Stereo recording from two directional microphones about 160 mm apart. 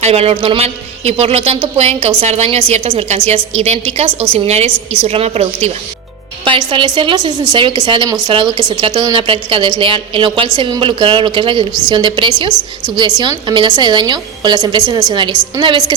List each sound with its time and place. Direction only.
0.0 s a man's voice: 40° right (ahead or behind)